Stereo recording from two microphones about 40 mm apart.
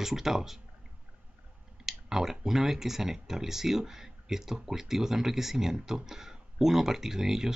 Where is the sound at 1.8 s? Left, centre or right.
Centre.